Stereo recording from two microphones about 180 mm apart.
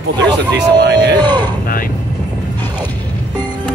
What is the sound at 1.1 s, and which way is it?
Speech, 25° right (ahead or behind).